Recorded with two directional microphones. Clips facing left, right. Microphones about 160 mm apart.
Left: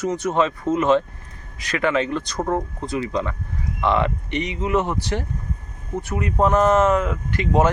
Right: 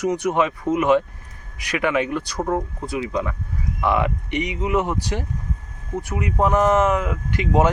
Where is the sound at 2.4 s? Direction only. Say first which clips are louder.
Even; centre (ahead or behind); by 7.7 s 15° right (ahead or behind).